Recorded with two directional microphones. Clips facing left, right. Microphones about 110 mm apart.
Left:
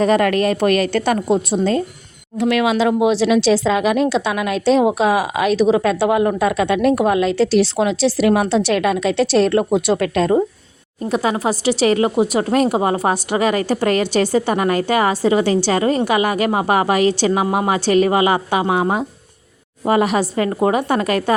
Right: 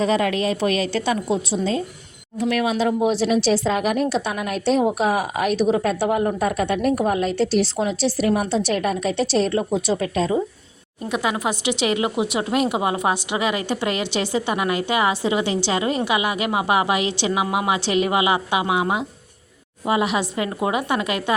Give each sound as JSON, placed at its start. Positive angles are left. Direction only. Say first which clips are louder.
{"t": 0.0, "sound": "a woman's voice", "louder": "left 5 dB", "side_deg": 55}
{"t": 2.4, "sound": "speech", "louder": "left 5 dB", "side_deg": 85}
{"t": 11.1, "sound": "a woman's voice", "louder": "left 4 dB", "side_deg": 35}